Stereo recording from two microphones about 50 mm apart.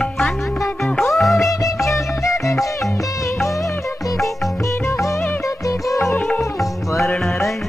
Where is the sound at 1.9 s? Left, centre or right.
Left.